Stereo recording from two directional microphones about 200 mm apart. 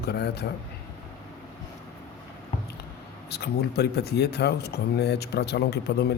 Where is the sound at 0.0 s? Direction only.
55° left (ahead or behind).